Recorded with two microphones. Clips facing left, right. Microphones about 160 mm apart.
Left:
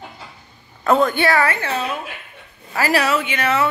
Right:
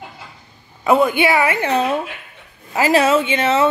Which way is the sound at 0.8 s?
10° right (ahead or behind).